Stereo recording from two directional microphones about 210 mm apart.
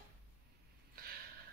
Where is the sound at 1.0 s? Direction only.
45° right (ahead or behind).